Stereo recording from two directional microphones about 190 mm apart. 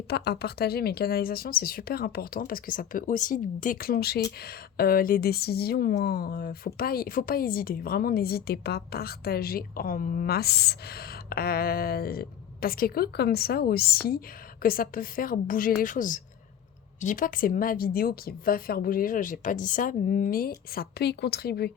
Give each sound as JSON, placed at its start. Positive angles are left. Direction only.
{"t": 0.1, "sound": "a woman's voice", "side_deg": 55}
{"t": 20.7, "sound": "speech", "side_deg": 60}